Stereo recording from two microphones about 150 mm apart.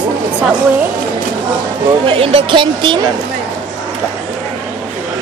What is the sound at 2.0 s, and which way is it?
Speech, 40° right (ahead or behind).